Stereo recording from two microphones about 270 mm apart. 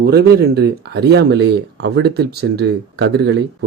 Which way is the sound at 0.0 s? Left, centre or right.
Right.